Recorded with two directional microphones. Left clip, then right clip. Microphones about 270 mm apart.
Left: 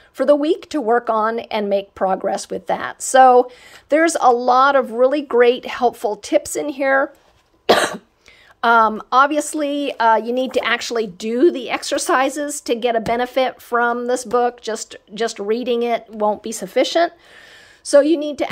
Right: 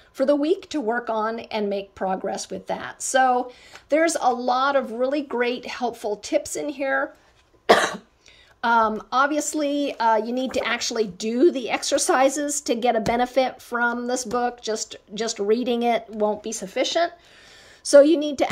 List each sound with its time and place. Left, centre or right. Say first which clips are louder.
0.2 s speech: left 5 dB; centre
7.6 s cough: left 2 dB; left
8.5 s speech: left 6 dB; centre
17.8 s a woman's voice: left 1 dB; centre